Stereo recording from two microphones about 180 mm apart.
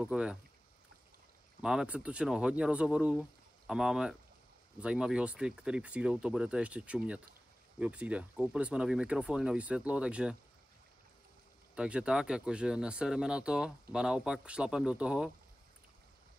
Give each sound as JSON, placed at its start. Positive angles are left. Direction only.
{"t": 0.0, "sound": "speech", "side_deg": -5}
{"t": 1.6, "sound": "speech", "side_deg": -5}
{"t": 11.7, "sound": "speech", "side_deg": -5}